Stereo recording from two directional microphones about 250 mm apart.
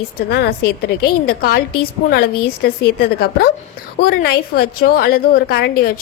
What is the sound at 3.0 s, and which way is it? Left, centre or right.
Speech, left.